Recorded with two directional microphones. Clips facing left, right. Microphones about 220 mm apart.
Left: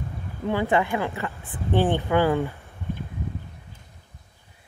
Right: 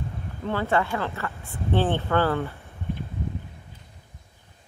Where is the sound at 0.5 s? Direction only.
15° left (ahead or behind).